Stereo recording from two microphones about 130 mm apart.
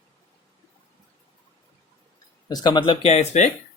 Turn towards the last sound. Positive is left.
turn(degrees=65)  # may be behind; listen again after turning